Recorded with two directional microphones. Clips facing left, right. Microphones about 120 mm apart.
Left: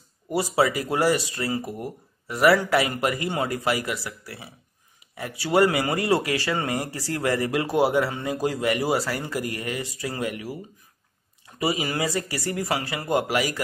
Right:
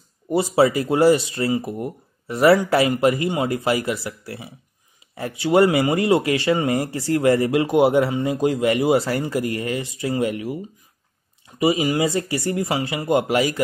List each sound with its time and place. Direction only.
0.3 s speech: 25° right (ahead or behind)